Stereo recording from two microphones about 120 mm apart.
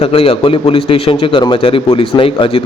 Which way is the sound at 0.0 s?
50° left (ahead or behind).